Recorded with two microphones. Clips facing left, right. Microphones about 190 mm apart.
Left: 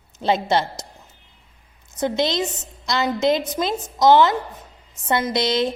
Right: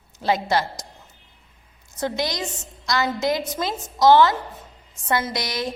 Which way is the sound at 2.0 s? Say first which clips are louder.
Left 4 dB; 25° left (ahead or behind).